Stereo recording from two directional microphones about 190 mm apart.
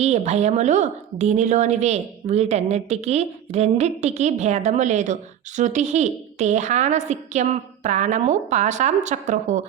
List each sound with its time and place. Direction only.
0.0 s a woman's voice: 35° right (ahead or behind)